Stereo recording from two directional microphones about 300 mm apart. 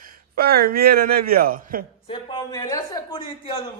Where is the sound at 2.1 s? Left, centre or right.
Centre.